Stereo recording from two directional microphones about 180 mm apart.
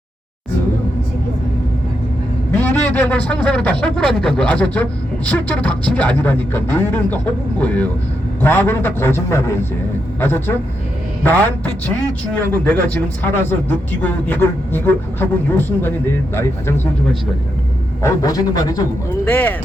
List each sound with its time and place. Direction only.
2.5 s a man's voice: 10° left (ahead or behind)
18.0 s speech: 20° left (ahead or behind)